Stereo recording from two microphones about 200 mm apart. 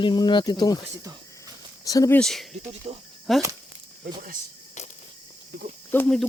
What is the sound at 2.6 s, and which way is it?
Speech, 30° right (ahead or behind).